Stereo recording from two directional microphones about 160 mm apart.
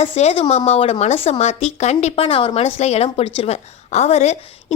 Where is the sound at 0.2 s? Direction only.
40° left (ahead or behind).